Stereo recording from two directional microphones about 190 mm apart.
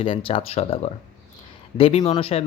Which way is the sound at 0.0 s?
25° left (ahead or behind).